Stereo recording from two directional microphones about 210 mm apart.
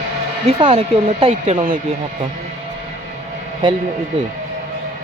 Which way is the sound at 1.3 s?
40° right (ahead or behind).